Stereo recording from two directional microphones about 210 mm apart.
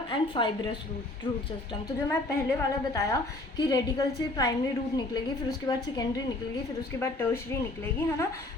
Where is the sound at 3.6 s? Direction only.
20° left (ahead or behind).